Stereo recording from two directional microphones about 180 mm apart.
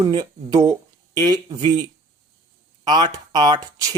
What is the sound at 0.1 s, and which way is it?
A man's voice, 20° right (ahead or behind).